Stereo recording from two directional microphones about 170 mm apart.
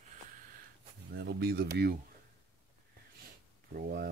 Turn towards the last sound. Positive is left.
turn(degrees=-65)  # may be behind; listen again after turning